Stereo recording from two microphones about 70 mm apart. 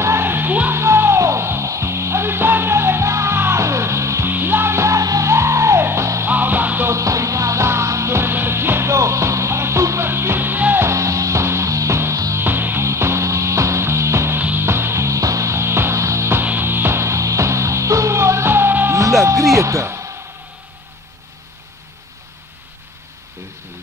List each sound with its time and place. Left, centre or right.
0.0 s music: right
0.7 s music: right
4.3 s music: right
6.2 s music: right
6.9 s music: right
10.9 s music: right
12.4 s music: right
12.8 s music: right
16.4 s music: right
18.9 s music: right